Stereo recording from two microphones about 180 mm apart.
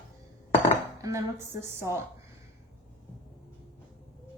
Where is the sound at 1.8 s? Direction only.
15° right (ahead or behind).